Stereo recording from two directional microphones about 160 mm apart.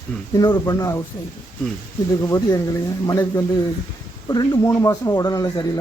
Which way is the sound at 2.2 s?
20° left (ahead or behind).